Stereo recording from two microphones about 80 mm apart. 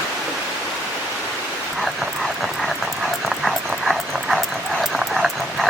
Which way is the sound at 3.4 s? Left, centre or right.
Centre.